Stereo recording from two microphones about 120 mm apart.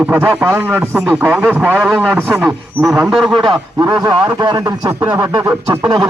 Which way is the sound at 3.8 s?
35° right (ahead or behind).